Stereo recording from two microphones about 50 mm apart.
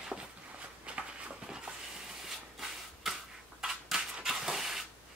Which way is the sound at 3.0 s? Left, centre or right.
Centre.